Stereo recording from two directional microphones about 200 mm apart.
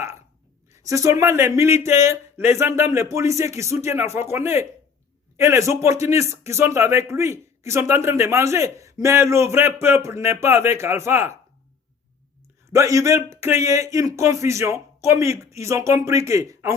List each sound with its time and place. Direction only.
0.7 s a sound: 15° right (ahead or behind)
1.2 s speech: 15° right (ahead or behind)
12.7 s speech: 15° right (ahead or behind)